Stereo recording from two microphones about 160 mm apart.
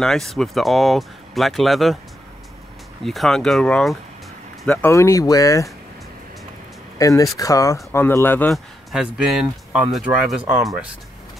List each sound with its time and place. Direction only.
0.0 s speech: centre (ahead or behind)
3.0 s speech: centre (ahead or behind)
4.6 s speech: 15° left (ahead or behind)
7.0 s speech: 20° left (ahead or behind)
8.5 s speech: centre (ahead or behind)